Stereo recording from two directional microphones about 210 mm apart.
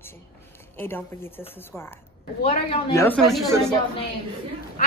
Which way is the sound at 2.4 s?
30° left (ahead or behind).